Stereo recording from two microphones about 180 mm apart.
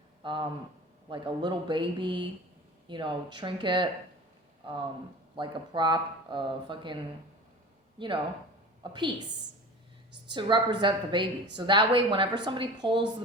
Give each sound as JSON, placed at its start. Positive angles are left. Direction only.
{"t": 0.2, "sound": "speech", "side_deg": -25}
{"t": 10.3, "sound": "speech", "side_deg": -25}